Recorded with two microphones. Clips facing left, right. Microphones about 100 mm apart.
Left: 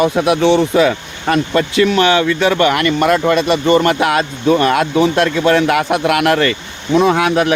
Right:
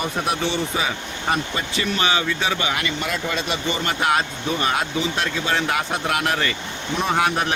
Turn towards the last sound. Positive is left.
turn(degrees=90)